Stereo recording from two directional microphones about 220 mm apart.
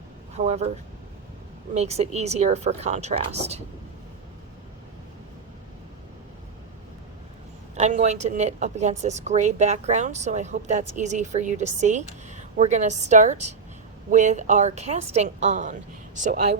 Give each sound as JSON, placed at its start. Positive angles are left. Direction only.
{"t": 0.3, "sound": "speech", "side_deg": -30}
{"t": 1.7, "sound": "speech", "side_deg": -30}
{"t": 7.8, "sound": "a woman's voice", "side_deg": -30}